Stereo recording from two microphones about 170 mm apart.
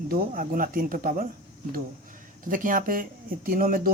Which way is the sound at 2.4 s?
50° right (ahead or behind).